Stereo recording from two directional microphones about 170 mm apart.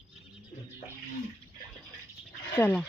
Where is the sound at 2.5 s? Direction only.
10° left (ahead or behind).